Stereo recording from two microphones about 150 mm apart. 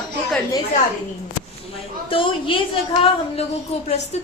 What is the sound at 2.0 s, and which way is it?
Speech, 35° left (ahead or behind).